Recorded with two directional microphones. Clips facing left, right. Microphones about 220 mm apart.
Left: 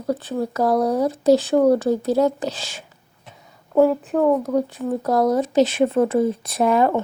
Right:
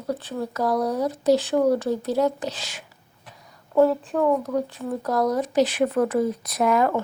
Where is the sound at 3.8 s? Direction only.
10° left (ahead or behind).